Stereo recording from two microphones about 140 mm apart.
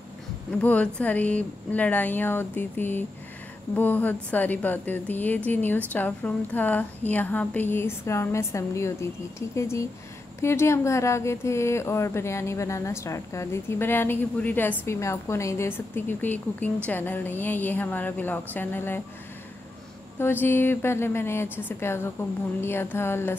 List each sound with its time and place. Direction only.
0.6 s a woman's voice: 10° left (ahead or behind)
20.2 s a woman's voice: 15° left (ahead or behind)